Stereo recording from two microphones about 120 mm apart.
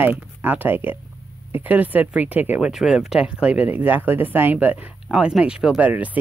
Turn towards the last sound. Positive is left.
turn(degrees=-15)  # may be behind; listen again after turning